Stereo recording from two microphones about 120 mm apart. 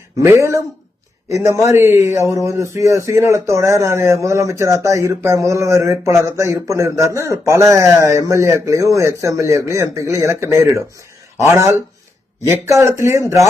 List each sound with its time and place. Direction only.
0.2 s speech: 25° right (ahead or behind)